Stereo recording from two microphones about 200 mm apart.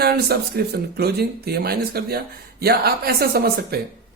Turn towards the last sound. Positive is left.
turn(degrees=-50)  # may be behind; listen again after turning